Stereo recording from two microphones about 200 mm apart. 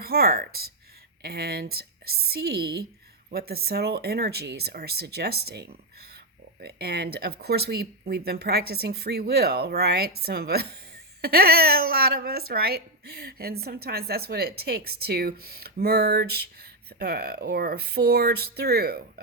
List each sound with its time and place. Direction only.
0.0 s speech: 50° right (ahead or behind)